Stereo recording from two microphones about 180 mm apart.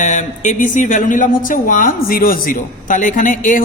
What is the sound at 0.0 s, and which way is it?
Speech, 45° left (ahead or behind).